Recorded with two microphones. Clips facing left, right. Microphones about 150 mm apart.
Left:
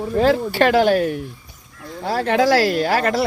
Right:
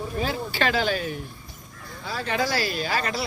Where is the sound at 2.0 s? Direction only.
75° left (ahead or behind).